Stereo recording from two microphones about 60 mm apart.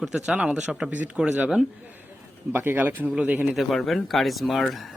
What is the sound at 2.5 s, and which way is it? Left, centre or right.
Speech, right.